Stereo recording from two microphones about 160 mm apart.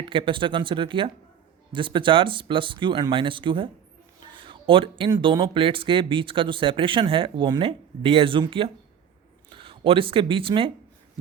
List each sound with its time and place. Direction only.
0.0 s speech: 35° right (ahead or behind)